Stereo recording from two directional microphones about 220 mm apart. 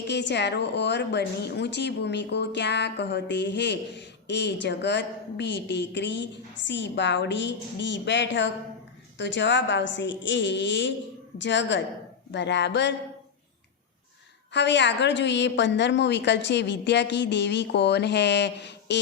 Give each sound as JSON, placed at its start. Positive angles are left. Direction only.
{"t": 0.1, "sound": "a woman's voice", "side_deg": 50}
{"t": 14.5, "sound": "a woman's voice", "side_deg": 50}